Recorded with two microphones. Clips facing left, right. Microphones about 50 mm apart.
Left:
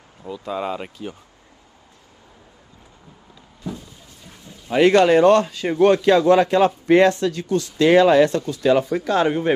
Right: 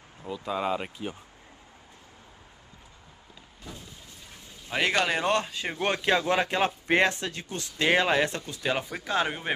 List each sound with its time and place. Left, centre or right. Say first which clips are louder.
0.3 s speech: left 3 dB; centre
4.6 s speech: left 12 dB; centre
5.3 s a man's voice: left 11 dB; centre
8.9 s speech: left 9 dB; centre